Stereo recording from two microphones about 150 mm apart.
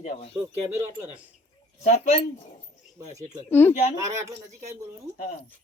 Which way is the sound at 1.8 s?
50° left (ahead or behind).